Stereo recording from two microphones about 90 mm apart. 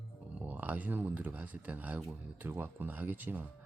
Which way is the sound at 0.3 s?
20° right (ahead or behind).